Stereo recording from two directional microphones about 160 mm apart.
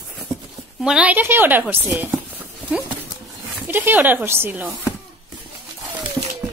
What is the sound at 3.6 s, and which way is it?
Speech, 10° right (ahead or behind).